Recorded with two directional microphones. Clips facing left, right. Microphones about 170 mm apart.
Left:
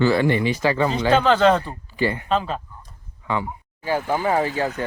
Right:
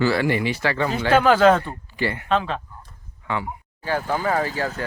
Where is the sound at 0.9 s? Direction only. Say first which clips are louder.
Right 4 dB; 5° right (ahead or behind).